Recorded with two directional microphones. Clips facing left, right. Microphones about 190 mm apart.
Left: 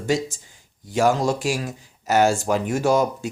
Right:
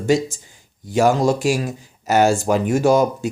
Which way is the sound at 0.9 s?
15° right (ahead or behind).